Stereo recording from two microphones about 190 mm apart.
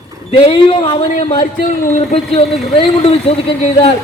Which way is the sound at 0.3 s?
30° left (ahead or behind).